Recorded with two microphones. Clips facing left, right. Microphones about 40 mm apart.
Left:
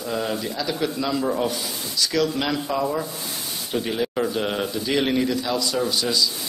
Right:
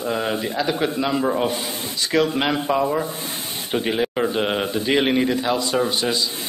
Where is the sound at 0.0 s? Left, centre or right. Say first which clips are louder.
Right 3 dB; right.